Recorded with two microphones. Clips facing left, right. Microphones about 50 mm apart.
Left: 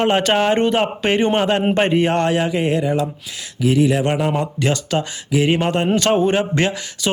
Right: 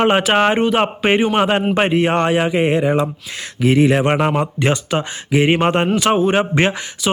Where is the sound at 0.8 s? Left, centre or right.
Right.